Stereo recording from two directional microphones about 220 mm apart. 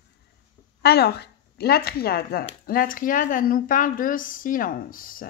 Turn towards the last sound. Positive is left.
turn(degrees=40)  # may be behind; listen again after turning